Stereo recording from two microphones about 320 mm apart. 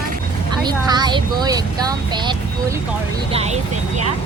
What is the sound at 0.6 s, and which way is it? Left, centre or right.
Speech, centre.